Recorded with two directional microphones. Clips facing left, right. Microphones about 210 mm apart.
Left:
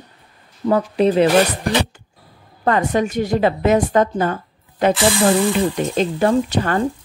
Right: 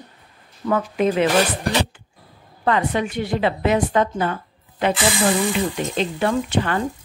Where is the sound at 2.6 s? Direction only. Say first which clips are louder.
Left 3 dB; 45° left (ahead or behind).